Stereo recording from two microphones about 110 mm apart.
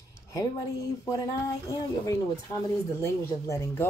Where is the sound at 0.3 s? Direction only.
30° left (ahead or behind).